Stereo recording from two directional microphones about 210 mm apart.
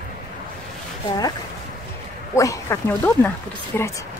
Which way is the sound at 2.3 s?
15° left (ahead or behind).